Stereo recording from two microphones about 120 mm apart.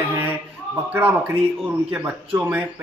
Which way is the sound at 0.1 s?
15° right (ahead or behind).